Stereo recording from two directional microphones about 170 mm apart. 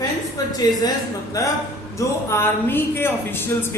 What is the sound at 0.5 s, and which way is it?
A woman's voice, 20° left (ahead or behind).